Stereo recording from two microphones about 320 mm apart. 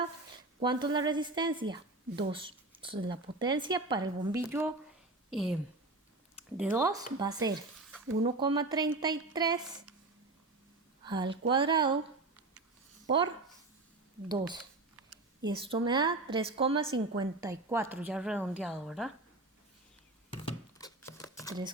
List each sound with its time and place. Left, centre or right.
0.6 s a woman's voice: centre
11.0 s a woman's voice: centre
13.1 s a woman's voice: centre
20.3 s a sound: centre